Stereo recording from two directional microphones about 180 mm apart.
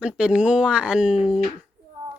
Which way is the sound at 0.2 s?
5° right (ahead or behind).